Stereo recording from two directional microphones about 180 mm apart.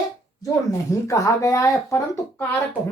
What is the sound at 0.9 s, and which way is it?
Speech, 15° left (ahead or behind).